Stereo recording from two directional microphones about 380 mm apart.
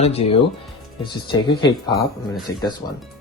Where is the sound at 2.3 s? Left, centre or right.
Centre.